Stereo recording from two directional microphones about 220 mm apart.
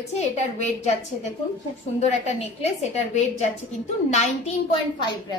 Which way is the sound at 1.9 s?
30° left (ahead or behind).